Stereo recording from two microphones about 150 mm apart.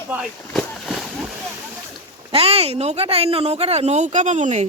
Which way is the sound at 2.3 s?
40° right (ahead or behind).